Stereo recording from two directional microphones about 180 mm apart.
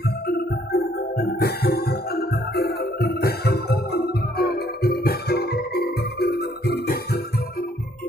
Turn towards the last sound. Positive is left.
turn(degrees=60)  # may be behind; listen again after turning